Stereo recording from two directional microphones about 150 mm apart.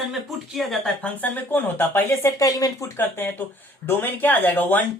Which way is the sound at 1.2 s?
10° left (ahead or behind).